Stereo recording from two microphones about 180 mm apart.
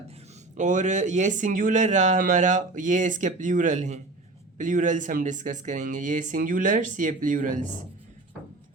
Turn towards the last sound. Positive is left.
turn(degrees=-45)  # may be behind; listen again after turning